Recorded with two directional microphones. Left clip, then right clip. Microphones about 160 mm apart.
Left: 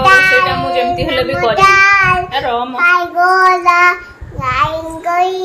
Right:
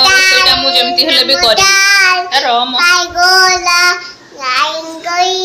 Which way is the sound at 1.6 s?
30° left (ahead or behind).